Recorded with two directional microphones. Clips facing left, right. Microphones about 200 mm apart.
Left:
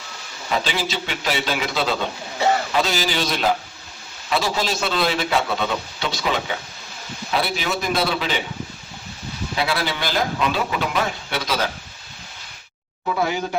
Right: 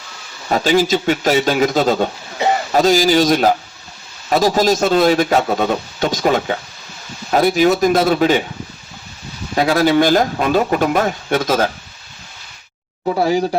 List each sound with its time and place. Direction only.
0.5 s a man's voice: 45° right (ahead or behind)
2.4 s a sound: 15° right (ahead or behind)
2.7 s a man's voice: 45° right (ahead or behind)
9.6 s a man's voice: 45° right (ahead or behind)
13.1 s speech: 35° right (ahead or behind)